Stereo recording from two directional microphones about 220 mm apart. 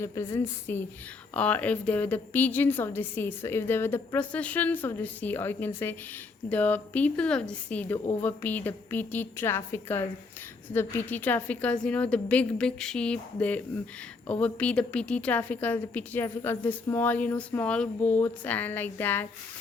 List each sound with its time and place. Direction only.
0.0 s a woman's voice: 10° left (ahead or behind)